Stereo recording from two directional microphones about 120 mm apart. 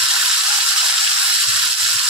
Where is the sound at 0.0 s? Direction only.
5° right (ahead or behind).